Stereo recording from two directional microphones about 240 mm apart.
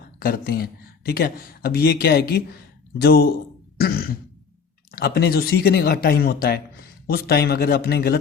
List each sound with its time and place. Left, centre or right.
0.2 s speech: left